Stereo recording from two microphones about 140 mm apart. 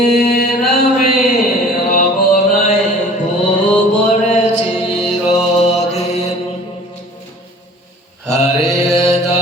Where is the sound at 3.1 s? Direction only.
60° left (ahead or behind).